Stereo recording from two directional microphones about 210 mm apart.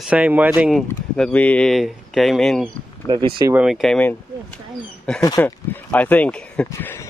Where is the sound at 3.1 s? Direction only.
20° right (ahead or behind).